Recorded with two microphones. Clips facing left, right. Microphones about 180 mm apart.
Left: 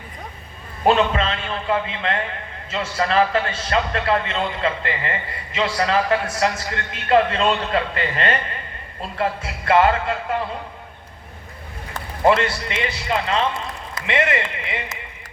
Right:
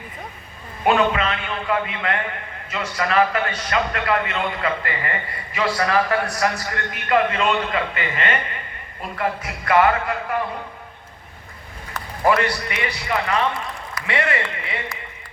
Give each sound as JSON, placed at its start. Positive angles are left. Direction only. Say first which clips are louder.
{"t": 0.9, "sound": "a man's voice", "louder": "left 1 dB", "side_deg": 30}
{"t": 11.9, "sound": "a man's voice", "louder": "left 2 dB", "side_deg": 25}